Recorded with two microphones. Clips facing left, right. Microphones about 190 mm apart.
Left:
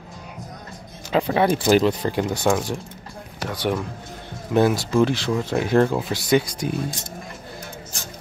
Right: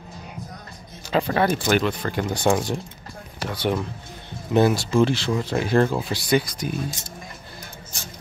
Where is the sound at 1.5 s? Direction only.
25° left (ahead or behind).